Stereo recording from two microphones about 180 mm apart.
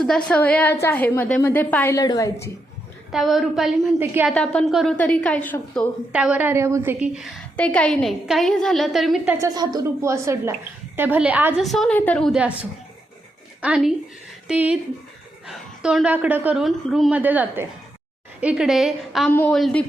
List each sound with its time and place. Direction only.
0.3 s a woman's voice: 10° left (ahead or behind)
3.1 s a woman's voice: centre (ahead or behind)
4.0 s a woman's voice: 10° right (ahead or behind)
4.3 s a woman's voice: 5° left (ahead or behind)
6.1 s a woman's voice: 5° right (ahead or behind)
7.2 s a woman's voice: 5° left (ahead or behind)
9.4 s a woman's voice: 20° right (ahead or behind)
13.6 s a woman's voice: 5° right (ahead or behind)